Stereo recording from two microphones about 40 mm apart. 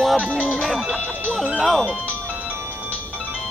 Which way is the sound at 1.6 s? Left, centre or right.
Centre.